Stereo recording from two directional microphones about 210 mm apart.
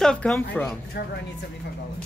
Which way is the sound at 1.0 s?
50° left (ahead or behind).